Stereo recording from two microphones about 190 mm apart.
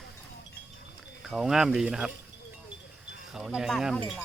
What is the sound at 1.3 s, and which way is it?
Speech, centre (ahead or behind).